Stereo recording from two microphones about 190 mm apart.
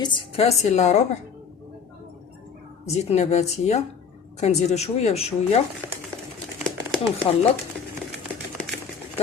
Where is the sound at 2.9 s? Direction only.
35° left (ahead or behind).